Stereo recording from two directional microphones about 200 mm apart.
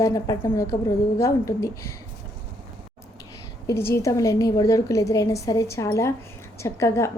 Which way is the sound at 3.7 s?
15° left (ahead or behind).